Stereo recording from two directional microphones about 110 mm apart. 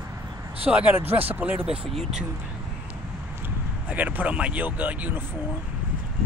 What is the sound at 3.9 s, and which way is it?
Speech, 15° right (ahead or behind).